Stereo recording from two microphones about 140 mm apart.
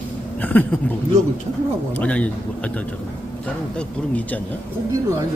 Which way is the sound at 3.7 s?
10° left (ahead or behind).